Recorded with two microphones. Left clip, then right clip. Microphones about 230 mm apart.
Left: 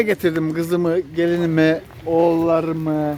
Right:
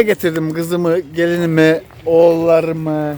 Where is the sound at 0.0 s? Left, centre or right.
Right.